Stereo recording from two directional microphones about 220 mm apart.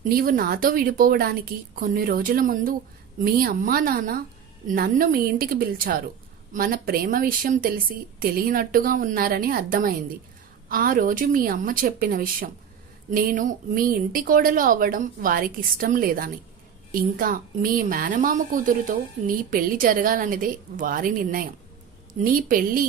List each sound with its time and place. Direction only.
0.0 s a woman's voice: 40° right (ahead or behind)